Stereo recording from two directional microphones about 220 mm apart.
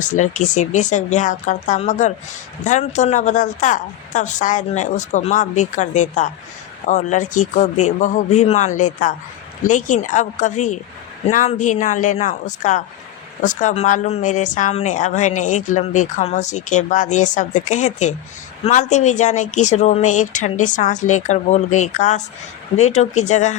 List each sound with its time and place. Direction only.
0.0 s speech: 35° left (ahead or behind)